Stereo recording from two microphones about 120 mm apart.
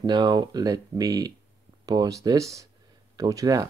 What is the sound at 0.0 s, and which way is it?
Speech, 40° right (ahead or behind).